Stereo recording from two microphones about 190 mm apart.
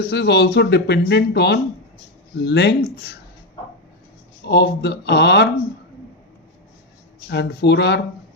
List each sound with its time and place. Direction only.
0.0 s speech: 60° left (ahead or behind)
4.4 s speech: 60° left (ahead or behind)
7.3 s speech: 60° left (ahead or behind)